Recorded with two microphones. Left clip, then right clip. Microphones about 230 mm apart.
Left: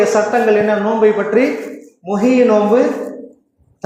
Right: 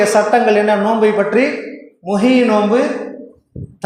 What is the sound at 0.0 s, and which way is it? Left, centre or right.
A woman's voice, right.